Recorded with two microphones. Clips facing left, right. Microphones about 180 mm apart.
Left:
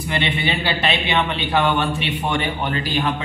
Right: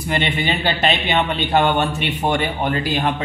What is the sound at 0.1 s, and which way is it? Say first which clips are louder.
Speech: right 2 dB; 40° right (ahead or behind).